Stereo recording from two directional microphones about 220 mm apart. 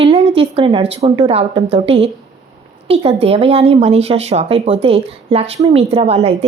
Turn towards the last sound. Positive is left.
turn(degrees=-30)  # may be behind; listen again after turning